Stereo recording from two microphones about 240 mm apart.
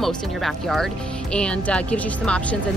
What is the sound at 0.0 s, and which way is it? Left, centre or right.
Speech, centre.